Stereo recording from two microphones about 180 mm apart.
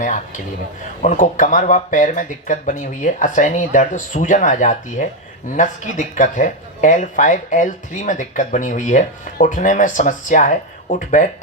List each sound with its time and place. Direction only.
0.0 s speech: 45° left (ahead or behind)